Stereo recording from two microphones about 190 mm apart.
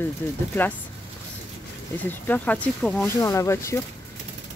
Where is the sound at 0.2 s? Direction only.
10° left (ahead or behind).